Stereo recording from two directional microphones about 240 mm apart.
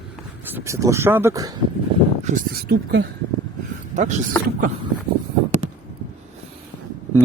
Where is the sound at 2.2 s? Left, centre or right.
Right.